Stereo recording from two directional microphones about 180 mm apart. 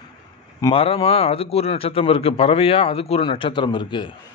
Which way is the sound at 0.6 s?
30° left (ahead or behind).